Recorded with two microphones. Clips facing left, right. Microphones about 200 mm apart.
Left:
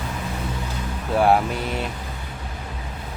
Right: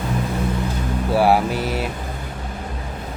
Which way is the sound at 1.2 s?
5° right (ahead or behind).